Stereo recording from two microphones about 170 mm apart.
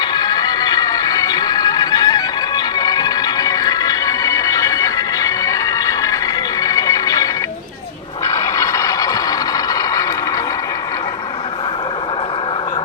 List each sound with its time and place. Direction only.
0.0 s music: 25° left (ahead or behind)
8.4 s vehicle: 20° left (ahead or behind)